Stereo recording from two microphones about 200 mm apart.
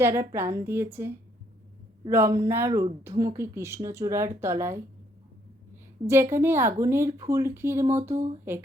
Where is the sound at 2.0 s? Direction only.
15° right (ahead or behind).